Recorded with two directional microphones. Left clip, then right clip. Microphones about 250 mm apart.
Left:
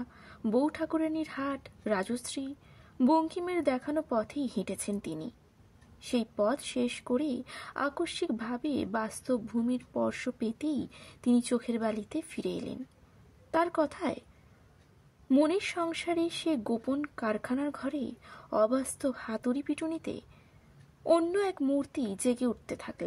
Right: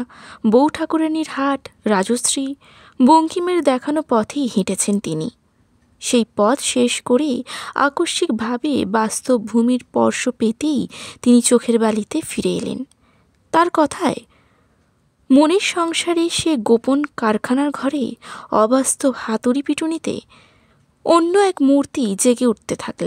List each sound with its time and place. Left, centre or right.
0.0 s a woman's voice: right
15.2 s a woman's voice: right